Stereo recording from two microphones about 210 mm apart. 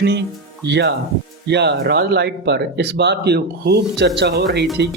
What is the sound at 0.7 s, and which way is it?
Speech, 55° right (ahead or behind).